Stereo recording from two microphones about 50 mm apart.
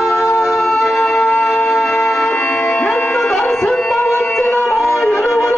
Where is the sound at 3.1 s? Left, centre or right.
Centre.